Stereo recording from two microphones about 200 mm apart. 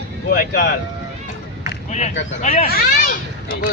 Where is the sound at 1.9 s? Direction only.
35° left (ahead or behind).